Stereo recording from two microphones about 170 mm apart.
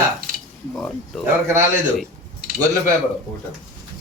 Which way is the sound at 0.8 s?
Centre (ahead or behind).